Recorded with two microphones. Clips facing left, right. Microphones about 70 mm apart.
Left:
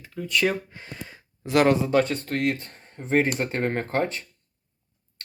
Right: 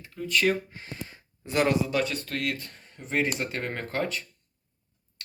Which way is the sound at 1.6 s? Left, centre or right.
Left.